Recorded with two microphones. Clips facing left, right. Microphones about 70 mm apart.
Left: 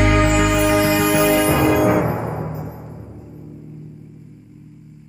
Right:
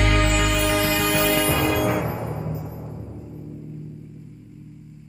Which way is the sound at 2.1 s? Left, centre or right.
Left.